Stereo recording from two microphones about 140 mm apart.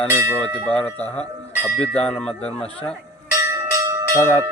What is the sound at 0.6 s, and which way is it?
Speech, 10° left (ahead or behind).